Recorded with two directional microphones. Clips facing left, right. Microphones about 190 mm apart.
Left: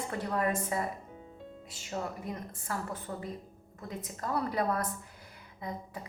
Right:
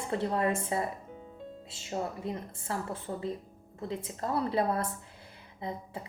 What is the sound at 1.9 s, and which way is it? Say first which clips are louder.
A woman's voice: right 3 dB; 25° right (ahead or behind).